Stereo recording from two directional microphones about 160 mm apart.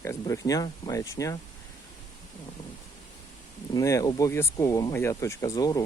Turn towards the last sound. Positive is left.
turn(degrees=20)  # may be behind; listen again after turning